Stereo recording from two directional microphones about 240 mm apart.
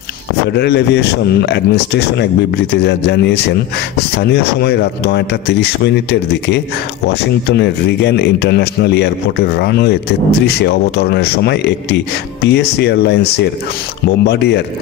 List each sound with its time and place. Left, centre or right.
0.5 s speech: left
7.1 s speech: left